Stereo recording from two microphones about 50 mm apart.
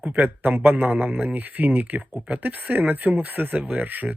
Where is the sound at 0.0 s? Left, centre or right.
Right.